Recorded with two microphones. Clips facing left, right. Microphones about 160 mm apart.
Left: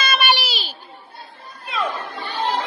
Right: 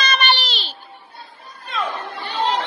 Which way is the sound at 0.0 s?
5° left (ahead or behind).